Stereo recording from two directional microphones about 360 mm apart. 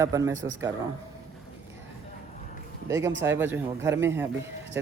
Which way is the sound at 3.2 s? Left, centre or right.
Centre.